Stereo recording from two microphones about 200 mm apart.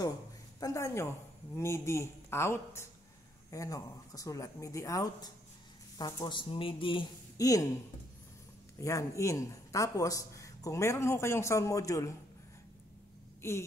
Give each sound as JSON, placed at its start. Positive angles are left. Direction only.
{"t": 0.6, "sound": "a man's voice", "side_deg": 15}
{"t": 8.7, "sound": "a man's voice", "side_deg": 15}
{"t": 13.4, "sound": "speech", "side_deg": 15}